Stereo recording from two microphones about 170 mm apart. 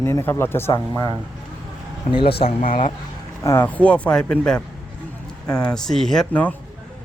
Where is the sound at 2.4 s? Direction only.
45° left (ahead or behind).